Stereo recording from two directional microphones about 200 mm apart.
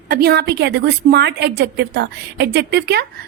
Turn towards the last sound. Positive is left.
turn(degrees=-55)  # may be behind; listen again after turning